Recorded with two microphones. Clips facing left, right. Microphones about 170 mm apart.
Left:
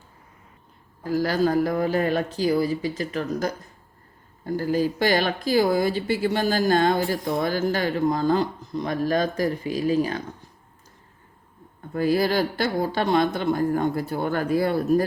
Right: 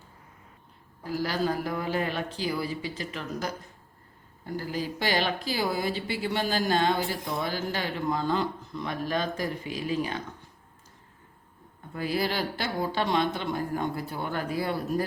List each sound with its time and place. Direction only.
1.1 s speech: 50° left (ahead or behind)
11.9 s speech: 45° left (ahead or behind)